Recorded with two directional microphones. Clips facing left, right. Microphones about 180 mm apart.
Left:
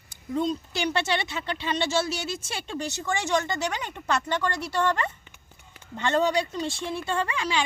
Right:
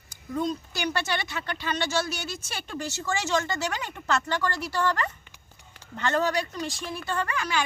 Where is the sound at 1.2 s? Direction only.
25° left (ahead or behind).